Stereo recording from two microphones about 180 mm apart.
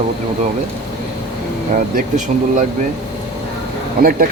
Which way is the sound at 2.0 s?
45° right (ahead or behind).